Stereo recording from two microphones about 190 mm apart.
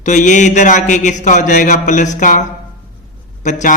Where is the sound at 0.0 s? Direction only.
40° left (ahead or behind).